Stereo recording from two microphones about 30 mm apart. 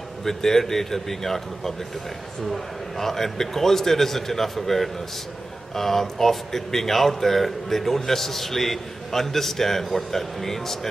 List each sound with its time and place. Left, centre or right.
0.2 s speech: centre